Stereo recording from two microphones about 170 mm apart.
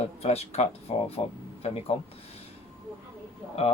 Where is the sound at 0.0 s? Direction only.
40° left (ahead or behind).